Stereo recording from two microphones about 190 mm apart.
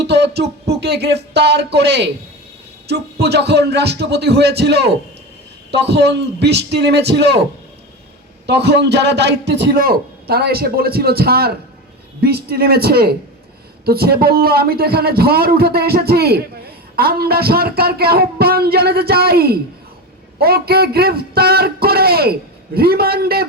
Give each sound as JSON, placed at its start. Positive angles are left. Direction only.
{"t": 0.0, "sound": "a man's voice", "side_deg": -60}
{"t": 8.4, "sound": "a man's voice", "side_deg": -65}